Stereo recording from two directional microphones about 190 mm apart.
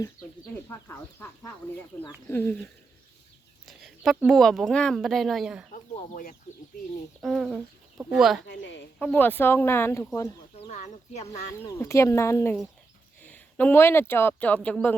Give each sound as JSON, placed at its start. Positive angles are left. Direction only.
{"t": 0.5, "sound": "speech", "side_deg": 10}
{"t": 2.3, "sound": "speech", "side_deg": 10}
{"t": 3.7, "sound": "speech", "side_deg": 0}
{"t": 5.7, "sound": "speech", "side_deg": 40}
{"t": 7.2, "sound": "speech", "side_deg": 0}
{"t": 8.4, "sound": "a woman's voice", "side_deg": 65}
{"t": 9.0, "sound": "speech", "side_deg": 10}
{"t": 10.6, "sound": "speech", "side_deg": 35}
{"t": 11.8, "sound": "speech", "side_deg": 15}